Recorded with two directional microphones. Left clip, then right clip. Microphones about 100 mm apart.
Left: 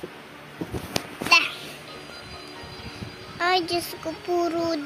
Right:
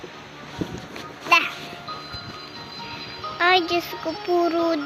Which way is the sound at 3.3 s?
Centre (ahead or behind).